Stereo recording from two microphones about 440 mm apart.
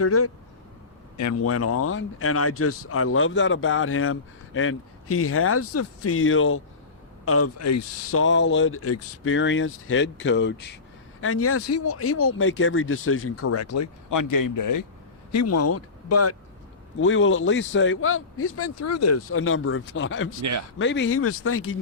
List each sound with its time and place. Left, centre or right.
0.0 s speech: left
15.3 s speech: left